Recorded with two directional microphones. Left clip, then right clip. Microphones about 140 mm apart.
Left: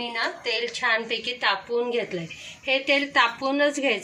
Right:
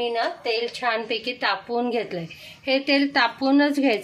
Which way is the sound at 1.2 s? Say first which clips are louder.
Left 1 dB; 90° right.